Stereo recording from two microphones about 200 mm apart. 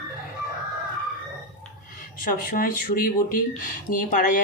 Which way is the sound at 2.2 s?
45° left (ahead or behind).